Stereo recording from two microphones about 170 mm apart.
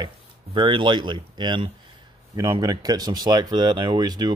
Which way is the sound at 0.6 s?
30° right (ahead or behind).